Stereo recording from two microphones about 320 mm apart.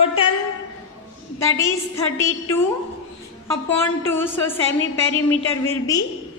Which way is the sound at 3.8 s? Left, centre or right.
Centre.